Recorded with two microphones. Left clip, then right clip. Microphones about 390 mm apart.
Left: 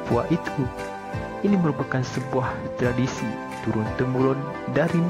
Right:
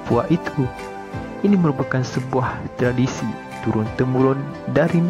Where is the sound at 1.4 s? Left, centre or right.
Right.